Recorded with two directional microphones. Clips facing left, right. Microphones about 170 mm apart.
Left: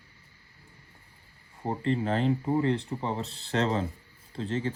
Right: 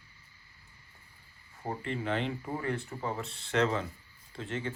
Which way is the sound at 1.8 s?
35° left (ahead or behind).